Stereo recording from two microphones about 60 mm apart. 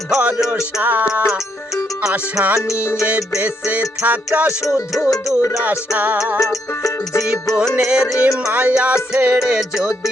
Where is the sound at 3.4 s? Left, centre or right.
Right.